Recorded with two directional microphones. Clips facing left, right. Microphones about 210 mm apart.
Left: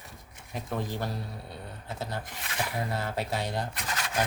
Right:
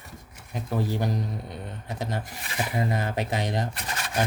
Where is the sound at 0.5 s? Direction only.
5° right (ahead or behind).